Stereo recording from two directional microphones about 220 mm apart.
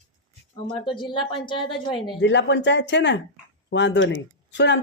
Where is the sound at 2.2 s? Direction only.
55° left (ahead or behind).